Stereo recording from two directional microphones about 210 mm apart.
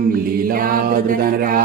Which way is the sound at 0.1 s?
45° right (ahead or behind).